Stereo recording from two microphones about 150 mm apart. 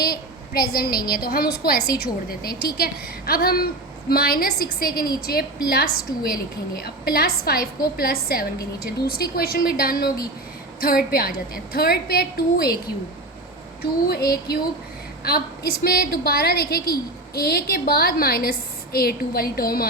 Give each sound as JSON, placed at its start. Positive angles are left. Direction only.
{"t": 0.0, "sound": "a woman's voice", "side_deg": 90}
{"t": 14.1, "sound": "a woman's voice", "side_deg": 90}